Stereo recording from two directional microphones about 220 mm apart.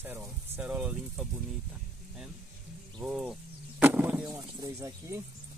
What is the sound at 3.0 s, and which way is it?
Speech, 5° right (ahead or behind).